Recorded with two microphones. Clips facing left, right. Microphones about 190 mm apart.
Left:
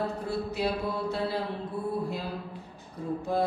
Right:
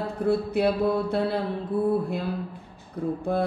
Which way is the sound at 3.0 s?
60° right (ahead or behind).